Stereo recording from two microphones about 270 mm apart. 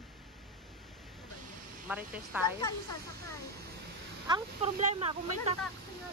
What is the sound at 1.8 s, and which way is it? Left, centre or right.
Speech, centre.